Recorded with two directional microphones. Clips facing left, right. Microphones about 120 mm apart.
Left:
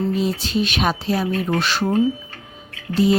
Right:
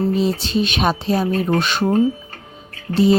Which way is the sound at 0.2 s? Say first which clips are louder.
Right 2 dB; 25° right (ahead or behind).